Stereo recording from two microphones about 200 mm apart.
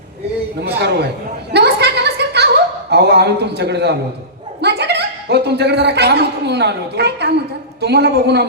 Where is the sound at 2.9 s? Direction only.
55° right (ahead or behind).